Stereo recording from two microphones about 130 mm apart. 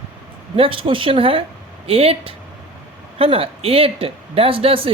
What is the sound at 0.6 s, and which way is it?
A woman's voice, 40° right (ahead or behind).